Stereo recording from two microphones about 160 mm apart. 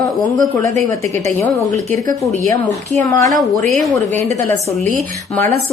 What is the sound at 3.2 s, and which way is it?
Speech, centre (ahead or behind).